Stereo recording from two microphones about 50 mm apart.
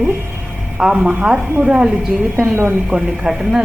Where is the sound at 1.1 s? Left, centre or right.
Right.